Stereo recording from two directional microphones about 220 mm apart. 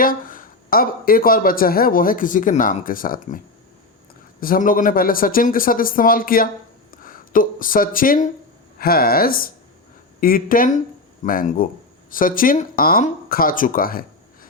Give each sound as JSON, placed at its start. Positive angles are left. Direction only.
{"t": 0.0, "sound": "speech", "side_deg": 40}